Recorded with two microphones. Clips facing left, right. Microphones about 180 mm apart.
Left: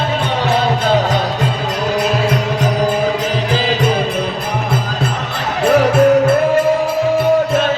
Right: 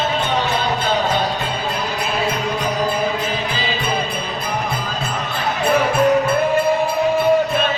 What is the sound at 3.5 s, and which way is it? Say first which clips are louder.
Music: left 8 dB; 90° left.